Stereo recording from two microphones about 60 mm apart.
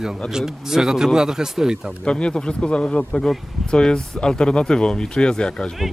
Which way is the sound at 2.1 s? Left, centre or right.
Centre.